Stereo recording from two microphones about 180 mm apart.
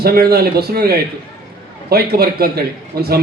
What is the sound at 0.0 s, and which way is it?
Speech, 60° right (ahead or behind).